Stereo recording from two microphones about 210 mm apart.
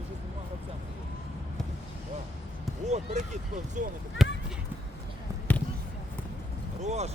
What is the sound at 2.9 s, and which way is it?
Speech, 35° right (ahead or behind).